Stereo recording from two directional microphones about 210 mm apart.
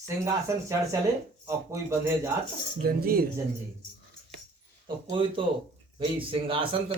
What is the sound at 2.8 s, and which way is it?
Speech, 45° right (ahead or behind).